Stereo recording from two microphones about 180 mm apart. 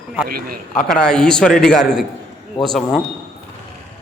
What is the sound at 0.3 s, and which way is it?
Speech, 55° right (ahead or behind).